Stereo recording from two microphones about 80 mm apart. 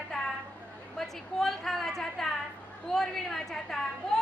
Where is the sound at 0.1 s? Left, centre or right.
Centre.